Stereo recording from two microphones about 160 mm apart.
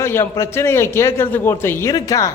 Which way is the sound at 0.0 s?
15° left (ahead or behind).